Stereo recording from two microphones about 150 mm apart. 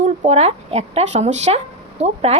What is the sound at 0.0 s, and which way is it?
Speech, 45° right (ahead or behind).